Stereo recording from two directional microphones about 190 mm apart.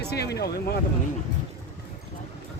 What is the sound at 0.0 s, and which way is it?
Speech, 60° left (ahead or behind).